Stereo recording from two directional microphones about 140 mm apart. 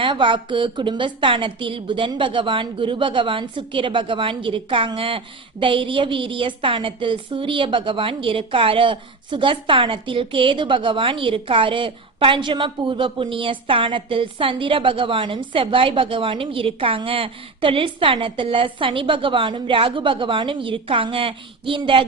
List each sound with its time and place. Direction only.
0.0 s a woman's voice: 35° right (ahead or behind)